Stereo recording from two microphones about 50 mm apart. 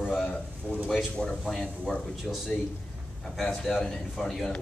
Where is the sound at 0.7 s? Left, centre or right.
Left.